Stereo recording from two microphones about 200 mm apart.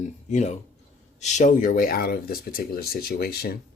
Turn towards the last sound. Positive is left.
turn(degrees=50)  # may be behind; listen again after turning